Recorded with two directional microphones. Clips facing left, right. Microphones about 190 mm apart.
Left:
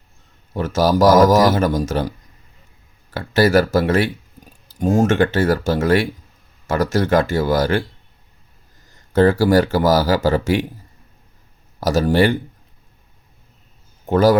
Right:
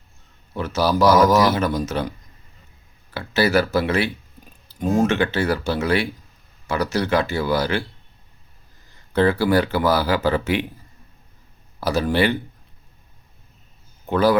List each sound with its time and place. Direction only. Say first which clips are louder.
0.5 s speech: left 4 dB; 45° left (ahead or behind)
3.1 s speech: left 4 dB; 45° left (ahead or behind)
9.1 s a man's voice: left 4 dB; 45° left (ahead or behind)
11.8 s speech: left 4 dB; 45° left (ahead or behind)
14.1 s speech: left 4 dB; 45° left (ahead or behind)